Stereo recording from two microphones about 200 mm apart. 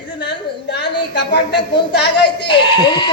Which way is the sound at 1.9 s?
55° left (ahead or behind).